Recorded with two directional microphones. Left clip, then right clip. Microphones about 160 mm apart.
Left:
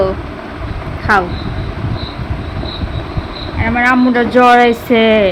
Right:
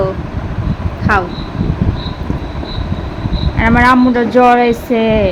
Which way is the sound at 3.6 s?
20° right (ahead or behind).